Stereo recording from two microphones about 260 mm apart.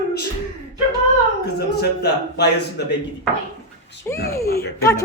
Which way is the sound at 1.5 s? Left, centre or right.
Left.